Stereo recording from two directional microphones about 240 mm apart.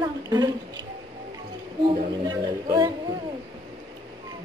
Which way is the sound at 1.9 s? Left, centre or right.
Centre.